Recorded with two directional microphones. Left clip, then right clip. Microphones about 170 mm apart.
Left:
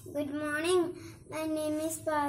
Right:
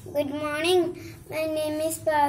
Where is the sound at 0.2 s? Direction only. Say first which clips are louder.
Right 6 dB; 15° left (ahead or behind).